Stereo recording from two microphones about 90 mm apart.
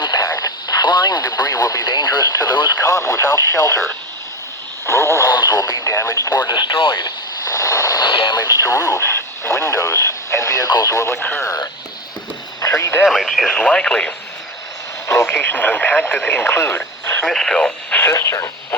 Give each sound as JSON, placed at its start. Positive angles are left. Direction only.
{"t": 0.0, "sound": "speech", "side_deg": 45}
{"t": 2.8, "sound": "speech", "side_deg": 35}
{"t": 4.9, "sound": "speech", "side_deg": 30}
{"t": 5.3, "sound": "radio", "side_deg": 45}
{"t": 8.0, "sound": "radio", "side_deg": 60}
{"t": 8.4, "sound": "speech", "side_deg": 40}
{"t": 11.4, "sound": "speech", "side_deg": 40}
{"t": 12.6, "sound": "radio", "side_deg": 35}
{"t": 13.0, "sound": "speech", "side_deg": 0}
{"t": 15.0, "sound": "speech", "side_deg": 30}
{"t": 17.2, "sound": "speech", "side_deg": 5}
{"t": 17.9, "sound": "speech", "side_deg": 30}